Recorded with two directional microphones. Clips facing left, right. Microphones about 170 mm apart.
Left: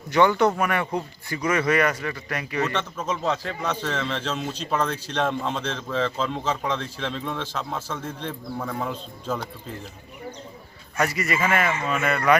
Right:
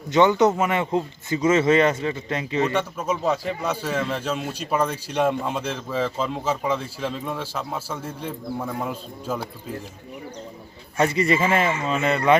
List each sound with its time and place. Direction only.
0.1 s speech: 20° right (ahead or behind)
2.7 s a man's voice: 10° right (ahead or behind)
10.9 s speech: 25° right (ahead or behind)